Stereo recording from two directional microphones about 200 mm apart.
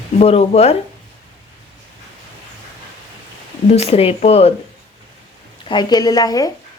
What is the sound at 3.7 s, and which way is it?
Speech, 30° left (ahead or behind).